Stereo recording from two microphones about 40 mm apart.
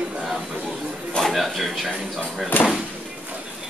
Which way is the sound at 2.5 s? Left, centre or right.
Left.